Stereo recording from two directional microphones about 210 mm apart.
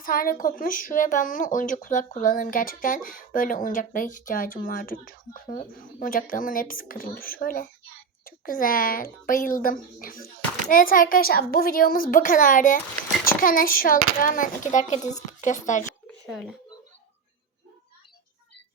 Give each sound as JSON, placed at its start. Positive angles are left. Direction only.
{"t": 0.0, "sound": "a child's voice", "side_deg": 40}
{"t": 16.2, "sound": "speech", "side_deg": 0}